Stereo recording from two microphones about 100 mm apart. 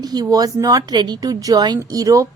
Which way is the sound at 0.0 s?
40° right (ahead or behind).